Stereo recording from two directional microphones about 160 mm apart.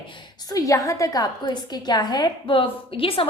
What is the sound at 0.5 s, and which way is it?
A woman's voice, 20° left (ahead or behind).